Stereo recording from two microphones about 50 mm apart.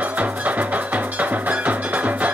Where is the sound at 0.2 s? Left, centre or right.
Right.